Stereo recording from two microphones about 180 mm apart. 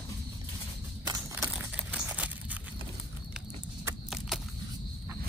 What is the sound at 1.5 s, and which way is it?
Crumpling, 5° right (ahead or behind).